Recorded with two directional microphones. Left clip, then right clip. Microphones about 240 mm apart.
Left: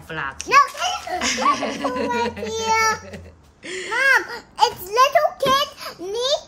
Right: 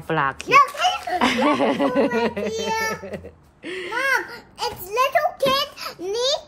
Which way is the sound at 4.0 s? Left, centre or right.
Centre.